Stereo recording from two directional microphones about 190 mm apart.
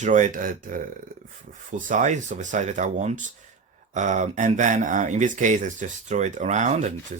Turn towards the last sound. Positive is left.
turn(degrees=-40)  # may be behind; listen again after turning